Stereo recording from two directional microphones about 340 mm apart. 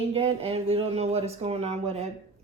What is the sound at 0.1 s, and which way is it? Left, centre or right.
Speech, centre.